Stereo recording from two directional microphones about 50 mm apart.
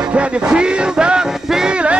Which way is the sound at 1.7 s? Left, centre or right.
Right.